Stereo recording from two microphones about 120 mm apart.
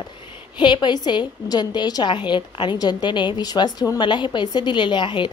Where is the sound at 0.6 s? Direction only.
40° left (ahead or behind).